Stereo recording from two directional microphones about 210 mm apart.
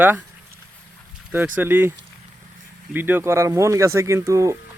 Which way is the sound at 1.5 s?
10° right (ahead or behind).